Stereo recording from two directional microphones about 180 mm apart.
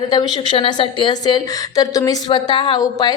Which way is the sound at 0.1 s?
20° left (ahead or behind).